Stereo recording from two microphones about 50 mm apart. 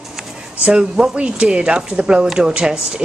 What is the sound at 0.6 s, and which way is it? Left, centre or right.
A woman's voice, centre.